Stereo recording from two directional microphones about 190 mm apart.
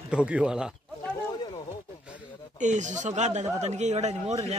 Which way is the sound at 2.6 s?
40° right (ahead or behind).